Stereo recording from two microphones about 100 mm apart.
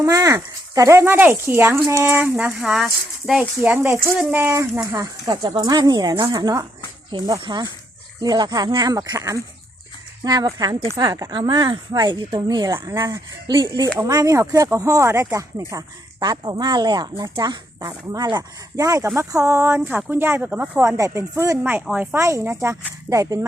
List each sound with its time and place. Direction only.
0.0 s speech: 35° right (ahead or behind); by 2.5 s 20° right (ahead or behind)
2.6 s speech: 5° right (ahead or behind)
3.6 s speech: 20° right (ahead or behind)
4.8 s speech: 40° right (ahead or behind)
13.5 s speech: 50° right (ahead or behind)
14.1 s speech: 35° right (ahead or behind)
16.2 s speech: 45° right (ahead or behind); by 21.6 s 30° right (ahead or behind)
21.6 s speech: 20° right (ahead or behind)
22.2 s speech: 30° right (ahead or behind)